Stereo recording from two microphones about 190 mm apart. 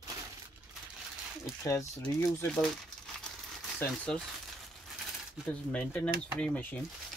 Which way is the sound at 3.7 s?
5° left (ahead or behind).